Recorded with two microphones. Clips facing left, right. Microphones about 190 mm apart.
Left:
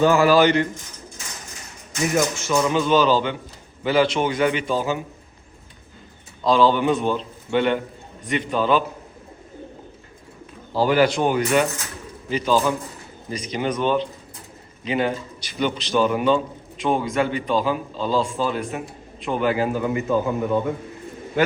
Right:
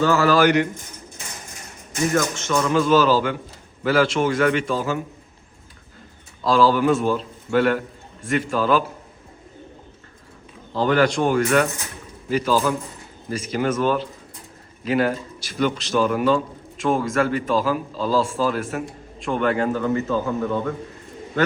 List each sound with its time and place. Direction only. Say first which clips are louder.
0.0 s a man's voice: left 2 dB; 15° left (ahead or behind)
0.4 s speech: right 1 dB; 15° right (ahead or behind)
2.1 s a man's voice: left 2 dB; 10° left (ahead or behind)
6.4 s a man's voice: even; centre (ahead or behind)
10.8 s a man's voice: left 1 dB; 5° left (ahead or behind)